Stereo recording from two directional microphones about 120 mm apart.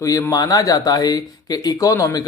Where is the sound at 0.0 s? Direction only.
30° left (ahead or behind).